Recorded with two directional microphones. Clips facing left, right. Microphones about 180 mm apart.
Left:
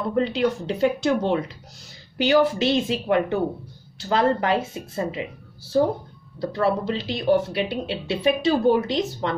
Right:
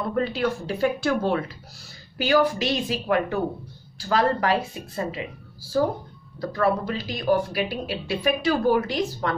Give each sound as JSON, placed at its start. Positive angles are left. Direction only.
{"t": 0.1, "sound": "speech", "side_deg": 20}
{"t": 6.4, "sound": "speech", "side_deg": 25}